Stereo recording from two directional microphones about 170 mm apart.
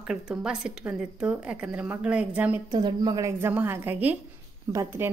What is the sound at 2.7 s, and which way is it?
A woman's voice, 25° right (ahead or behind).